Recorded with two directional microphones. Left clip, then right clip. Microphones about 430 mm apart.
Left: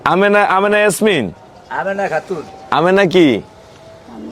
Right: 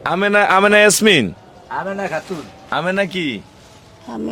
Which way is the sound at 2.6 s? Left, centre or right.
Centre.